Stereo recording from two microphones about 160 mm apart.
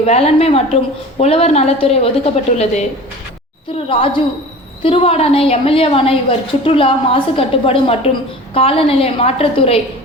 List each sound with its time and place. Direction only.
0.0 s a woman's voice: 40° left (ahead or behind)
3.8 s a woman's voice: 35° left (ahead or behind)